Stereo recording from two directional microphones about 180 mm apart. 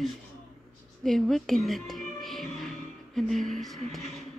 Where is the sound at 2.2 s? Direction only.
Centre (ahead or behind).